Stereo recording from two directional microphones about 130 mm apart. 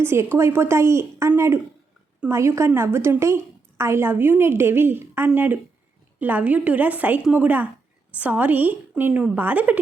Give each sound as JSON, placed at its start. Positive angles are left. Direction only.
{"t": 0.0, "sound": "a woman's voice", "side_deg": -20}
{"t": 2.3, "sound": "a woman's voice", "side_deg": -20}